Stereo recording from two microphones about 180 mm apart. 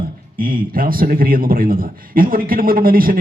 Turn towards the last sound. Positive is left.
turn(degrees=-55)  # may be behind; listen again after turning